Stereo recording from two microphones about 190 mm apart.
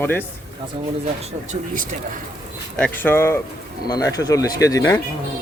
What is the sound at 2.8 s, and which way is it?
Speech, 10° left (ahead or behind).